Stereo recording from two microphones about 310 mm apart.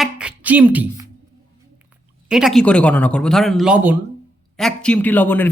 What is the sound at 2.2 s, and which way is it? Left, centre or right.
A man's voice, centre.